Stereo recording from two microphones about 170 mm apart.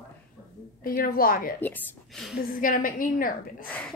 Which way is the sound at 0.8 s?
55° left (ahead or behind).